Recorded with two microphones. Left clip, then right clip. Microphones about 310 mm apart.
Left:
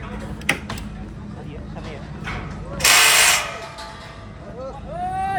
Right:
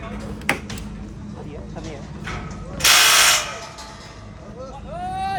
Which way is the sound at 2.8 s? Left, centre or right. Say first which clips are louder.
Even; left.